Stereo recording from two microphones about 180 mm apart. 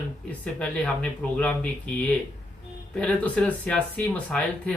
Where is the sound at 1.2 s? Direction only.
5° left (ahead or behind).